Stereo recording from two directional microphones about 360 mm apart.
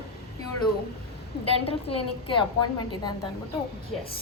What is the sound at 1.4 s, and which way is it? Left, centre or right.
A woman's voice, centre.